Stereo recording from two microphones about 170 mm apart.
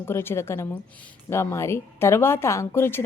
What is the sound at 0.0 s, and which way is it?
A woman's voice, 15° left (ahead or behind).